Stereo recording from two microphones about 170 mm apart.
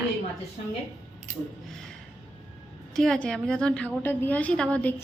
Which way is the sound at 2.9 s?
5° left (ahead or behind).